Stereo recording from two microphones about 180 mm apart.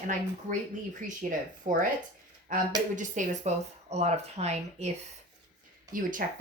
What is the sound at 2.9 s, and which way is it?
Speech, 45° right (ahead or behind).